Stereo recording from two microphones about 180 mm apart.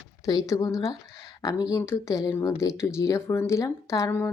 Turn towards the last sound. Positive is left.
turn(degrees=15)  # may be behind; listen again after turning